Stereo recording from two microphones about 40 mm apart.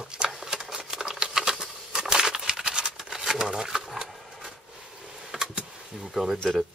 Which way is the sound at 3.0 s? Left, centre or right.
Centre.